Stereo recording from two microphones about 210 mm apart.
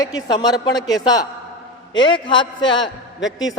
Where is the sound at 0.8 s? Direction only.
Centre (ahead or behind).